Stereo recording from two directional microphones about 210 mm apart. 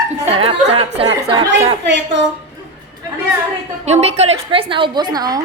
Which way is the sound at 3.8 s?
30° right (ahead or behind).